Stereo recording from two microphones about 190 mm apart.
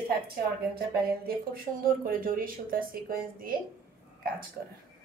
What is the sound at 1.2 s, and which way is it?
A woman's voice, 50° right (ahead or behind).